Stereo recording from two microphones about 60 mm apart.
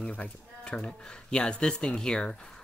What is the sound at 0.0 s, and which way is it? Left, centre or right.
Speech, left.